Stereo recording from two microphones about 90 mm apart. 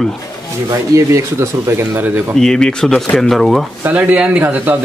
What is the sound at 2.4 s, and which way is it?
Speech, 5° left (ahead or behind).